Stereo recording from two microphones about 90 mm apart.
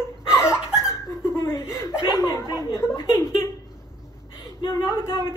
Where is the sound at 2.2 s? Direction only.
35° left (ahead or behind).